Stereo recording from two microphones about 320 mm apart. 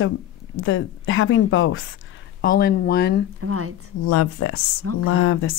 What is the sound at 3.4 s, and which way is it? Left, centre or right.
Speech, right.